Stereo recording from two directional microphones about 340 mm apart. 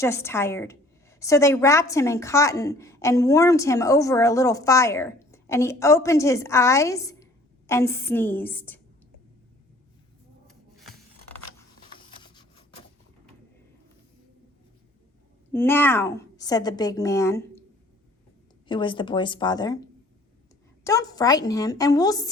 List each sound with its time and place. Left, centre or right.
0.0 s a woman's voice: centre
10.4 s scissors: centre
11.9 s printer: centre
15.5 s a woman's voice: centre
18.7 s a woman's voice: centre
20.8 s a woman's voice: centre